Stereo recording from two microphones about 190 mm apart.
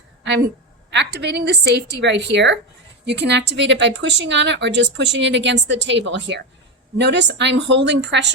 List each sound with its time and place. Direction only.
0.9 s a woman's voice: 65° right (ahead or behind)